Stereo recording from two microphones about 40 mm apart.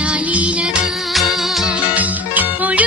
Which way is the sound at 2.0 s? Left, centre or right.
Right.